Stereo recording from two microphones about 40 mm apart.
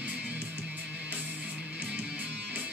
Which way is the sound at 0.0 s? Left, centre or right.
Right.